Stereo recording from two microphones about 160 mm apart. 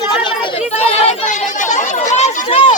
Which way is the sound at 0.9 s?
40° left (ahead or behind).